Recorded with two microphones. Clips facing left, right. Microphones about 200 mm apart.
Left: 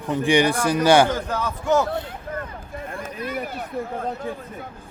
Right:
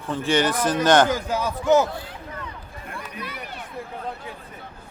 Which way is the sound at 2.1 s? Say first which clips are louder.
Left 5 dB; 50° left (ahead or behind).